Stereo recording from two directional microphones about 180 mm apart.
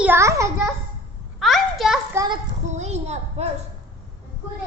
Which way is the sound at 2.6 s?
40° right (ahead or behind).